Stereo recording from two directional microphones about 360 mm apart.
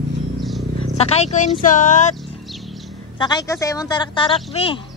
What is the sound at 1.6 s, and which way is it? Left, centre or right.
Music, left.